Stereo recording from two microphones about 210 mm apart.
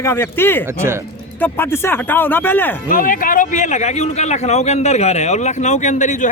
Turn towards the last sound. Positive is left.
turn(degrees=35)  # may be behind; listen again after turning